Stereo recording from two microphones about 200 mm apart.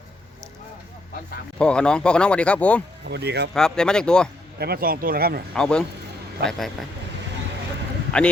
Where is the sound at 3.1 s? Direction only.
55° right (ahead or behind).